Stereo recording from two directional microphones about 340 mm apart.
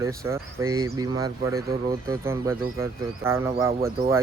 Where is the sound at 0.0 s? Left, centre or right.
Centre.